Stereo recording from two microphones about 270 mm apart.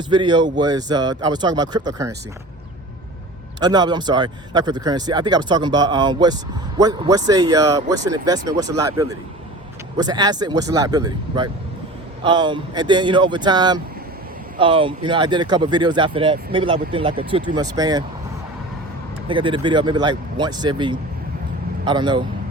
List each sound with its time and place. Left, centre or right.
0.1 s speech: centre
3.6 s speech: centre
19.3 s speech: centre